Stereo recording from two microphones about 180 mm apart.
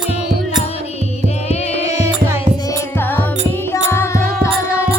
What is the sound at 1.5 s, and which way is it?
Music, 35° left (ahead or behind).